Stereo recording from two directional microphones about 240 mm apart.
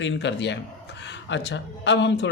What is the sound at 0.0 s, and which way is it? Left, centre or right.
A man's voice, left.